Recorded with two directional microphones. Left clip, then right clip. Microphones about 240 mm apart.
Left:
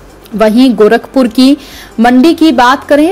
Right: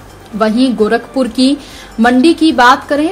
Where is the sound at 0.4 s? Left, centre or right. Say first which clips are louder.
Left 6 dB; left.